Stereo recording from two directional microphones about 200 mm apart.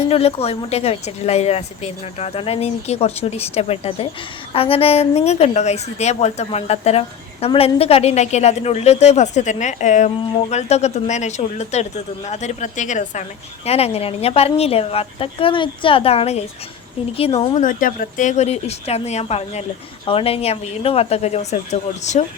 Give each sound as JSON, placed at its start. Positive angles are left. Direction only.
{"t": 0.1, "sound": "a woman's voice", "side_deg": 30}